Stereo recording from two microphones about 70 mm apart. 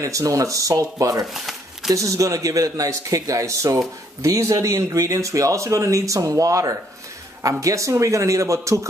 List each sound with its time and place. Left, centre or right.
0.0 s speech: right
1.2 s speech: centre
1.9 s speech: right